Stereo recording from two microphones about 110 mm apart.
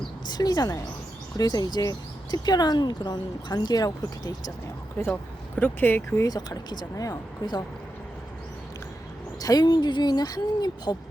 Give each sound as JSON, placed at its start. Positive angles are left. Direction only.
{"t": 0.3, "sound": "speech", "side_deg": 40}
{"t": 5.5, "sound": "speech", "side_deg": 20}
{"t": 6.2, "sound": "speech", "side_deg": 35}
{"t": 9.4, "sound": "speech", "side_deg": 35}